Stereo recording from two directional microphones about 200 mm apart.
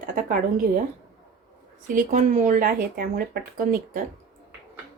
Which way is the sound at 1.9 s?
40° right (ahead or behind).